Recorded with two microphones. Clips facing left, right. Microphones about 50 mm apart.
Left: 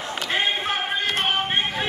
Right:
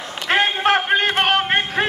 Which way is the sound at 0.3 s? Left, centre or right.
Right.